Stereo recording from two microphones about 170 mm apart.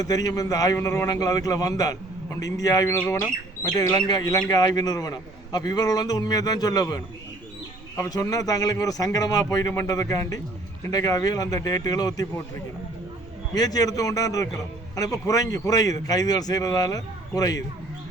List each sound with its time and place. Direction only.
0.0 s a man's voice: 20° left (ahead or behind)
13.5 s a man's voice: 20° left (ahead or behind)